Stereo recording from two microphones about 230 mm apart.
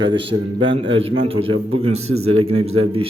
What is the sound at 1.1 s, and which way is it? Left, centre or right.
Speech, right.